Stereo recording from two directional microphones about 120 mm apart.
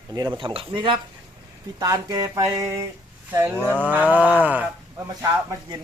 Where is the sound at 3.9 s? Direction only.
15° right (ahead or behind).